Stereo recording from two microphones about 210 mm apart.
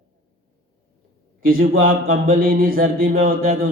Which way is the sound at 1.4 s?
45° right (ahead or behind).